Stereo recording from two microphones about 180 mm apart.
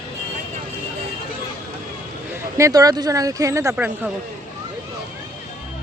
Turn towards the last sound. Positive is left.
turn(degrees=-10)  # may be behind; listen again after turning